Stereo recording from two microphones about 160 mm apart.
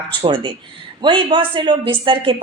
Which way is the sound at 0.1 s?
30° right (ahead or behind).